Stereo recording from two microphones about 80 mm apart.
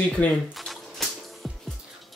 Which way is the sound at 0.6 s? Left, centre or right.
Centre.